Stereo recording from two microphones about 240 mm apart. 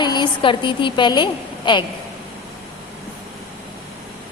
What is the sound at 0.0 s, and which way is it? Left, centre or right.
A woman's voice, centre.